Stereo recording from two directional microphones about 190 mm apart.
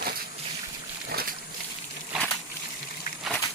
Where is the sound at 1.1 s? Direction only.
50° right (ahead or behind).